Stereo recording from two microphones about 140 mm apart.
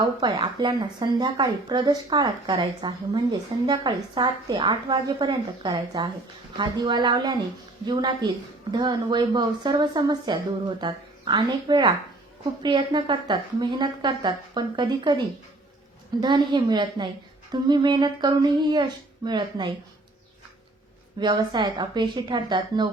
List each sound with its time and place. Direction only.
0.0 s speech: 30° right (ahead or behind)
21.2 s speech: 30° right (ahead or behind)